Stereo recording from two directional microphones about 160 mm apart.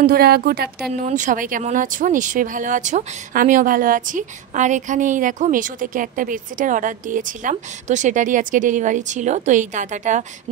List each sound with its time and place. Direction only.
0.0 s speech: 75° right (ahead or behind)
1.0 s speech: 50° right (ahead or behind)